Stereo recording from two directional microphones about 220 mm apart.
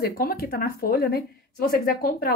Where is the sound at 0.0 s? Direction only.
45° left (ahead or behind).